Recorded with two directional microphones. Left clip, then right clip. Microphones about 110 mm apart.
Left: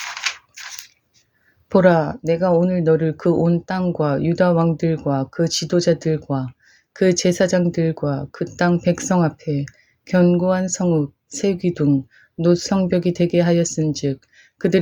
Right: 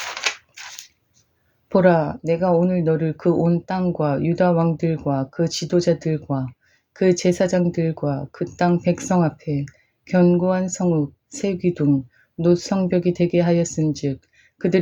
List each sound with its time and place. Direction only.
0.1 s scissors: 20° left (ahead or behind)
1.7 s speech: 40° left (ahead or behind)